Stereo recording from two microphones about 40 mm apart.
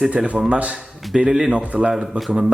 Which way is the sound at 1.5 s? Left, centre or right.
Right.